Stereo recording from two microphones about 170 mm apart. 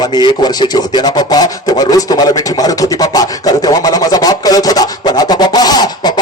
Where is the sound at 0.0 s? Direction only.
25° left (ahead or behind).